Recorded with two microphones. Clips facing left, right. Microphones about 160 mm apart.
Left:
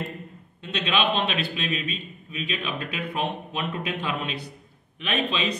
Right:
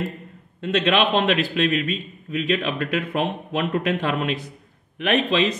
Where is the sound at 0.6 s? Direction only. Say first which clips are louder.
Right 6 dB; 80° right.